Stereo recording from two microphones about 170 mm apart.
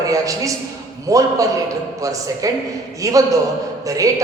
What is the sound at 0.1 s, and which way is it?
A man's voice, 20° right (ahead or behind).